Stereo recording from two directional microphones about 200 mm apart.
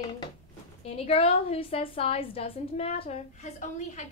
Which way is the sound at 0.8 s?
30° left (ahead or behind).